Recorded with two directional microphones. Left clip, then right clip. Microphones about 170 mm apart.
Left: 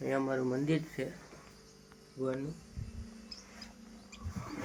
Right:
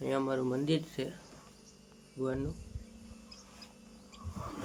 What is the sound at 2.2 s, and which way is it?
Speech, 20° right (ahead or behind).